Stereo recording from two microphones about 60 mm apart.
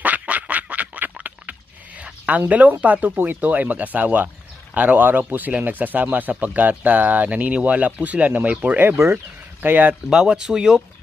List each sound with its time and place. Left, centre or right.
0.0 s a sound: right
4.7 s speech: right
9.6 s speech: right
10.0 s speech: centre